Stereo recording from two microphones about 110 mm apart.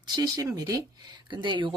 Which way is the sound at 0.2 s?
35° right (ahead or behind).